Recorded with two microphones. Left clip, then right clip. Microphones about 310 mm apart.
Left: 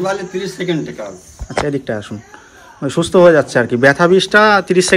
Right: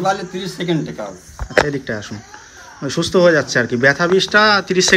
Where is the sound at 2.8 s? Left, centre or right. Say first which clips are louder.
Left 4 dB; centre.